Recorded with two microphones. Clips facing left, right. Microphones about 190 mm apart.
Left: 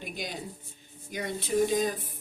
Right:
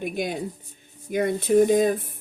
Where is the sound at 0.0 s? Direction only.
55° right (ahead or behind).